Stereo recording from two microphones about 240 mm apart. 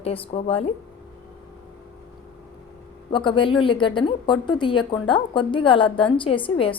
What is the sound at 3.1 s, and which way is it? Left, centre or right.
A woman's voice, left.